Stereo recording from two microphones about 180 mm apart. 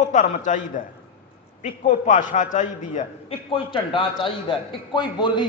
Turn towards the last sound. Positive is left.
turn(degrees=25)  # may be behind; listen again after turning